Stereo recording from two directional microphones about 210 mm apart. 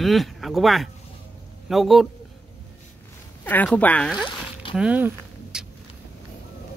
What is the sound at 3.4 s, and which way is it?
Speech, 10° left (ahead or behind).